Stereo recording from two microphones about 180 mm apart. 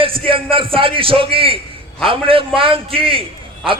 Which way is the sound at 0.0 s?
30° right (ahead or behind).